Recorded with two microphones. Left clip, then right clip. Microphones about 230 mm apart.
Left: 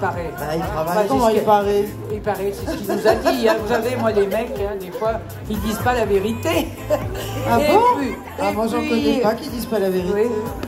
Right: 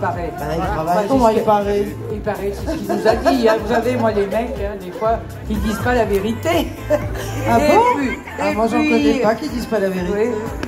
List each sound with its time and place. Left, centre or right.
0.0 s speech: left